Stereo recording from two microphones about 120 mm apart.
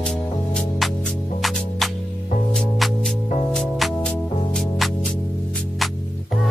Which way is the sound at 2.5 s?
Centre (ahead or behind).